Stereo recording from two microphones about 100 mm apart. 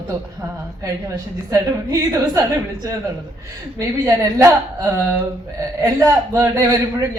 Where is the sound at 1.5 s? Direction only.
35° right (ahead or behind).